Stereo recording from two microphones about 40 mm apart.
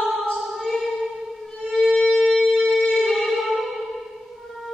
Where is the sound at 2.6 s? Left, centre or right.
Centre.